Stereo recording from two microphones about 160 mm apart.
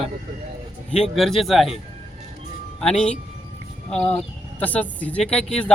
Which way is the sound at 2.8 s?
5° left (ahead or behind).